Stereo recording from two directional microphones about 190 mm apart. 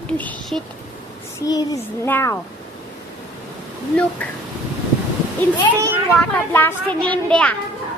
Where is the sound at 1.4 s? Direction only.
20° left (ahead or behind).